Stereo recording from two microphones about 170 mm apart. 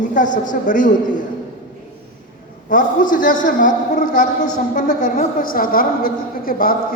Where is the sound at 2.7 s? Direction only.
50° left (ahead or behind).